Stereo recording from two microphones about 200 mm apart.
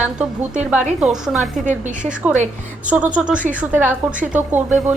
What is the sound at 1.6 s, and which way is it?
Speech, 40° right (ahead or behind).